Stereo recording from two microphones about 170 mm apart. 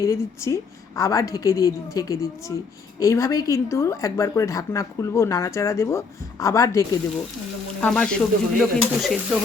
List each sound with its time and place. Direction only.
0.0 s a woman's voice: 15° left (ahead or behind)
7.8 s stir: 5° left (ahead or behind)